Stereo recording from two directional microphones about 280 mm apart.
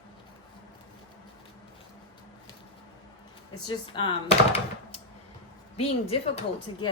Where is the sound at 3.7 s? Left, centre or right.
Centre.